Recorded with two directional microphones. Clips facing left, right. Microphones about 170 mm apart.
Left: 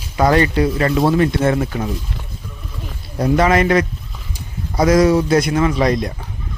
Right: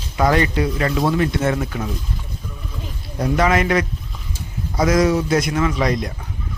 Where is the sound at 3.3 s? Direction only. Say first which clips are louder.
Left 3 dB; 35° left (ahead or behind).